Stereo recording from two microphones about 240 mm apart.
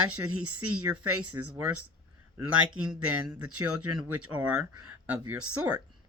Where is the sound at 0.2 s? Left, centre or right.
Right.